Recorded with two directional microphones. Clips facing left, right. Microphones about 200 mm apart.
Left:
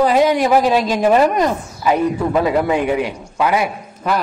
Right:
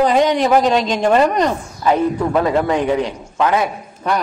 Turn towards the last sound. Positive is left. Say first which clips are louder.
# even
turn(degrees=5)  # may be behind; listen again after turning